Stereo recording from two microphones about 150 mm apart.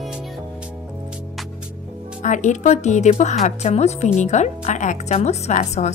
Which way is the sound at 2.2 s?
55° left (ahead or behind).